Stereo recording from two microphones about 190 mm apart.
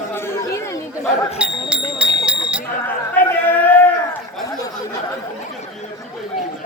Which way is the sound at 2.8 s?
10° left (ahead or behind).